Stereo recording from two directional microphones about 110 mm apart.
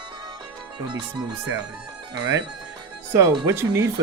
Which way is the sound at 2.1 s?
35° right (ahead or behind).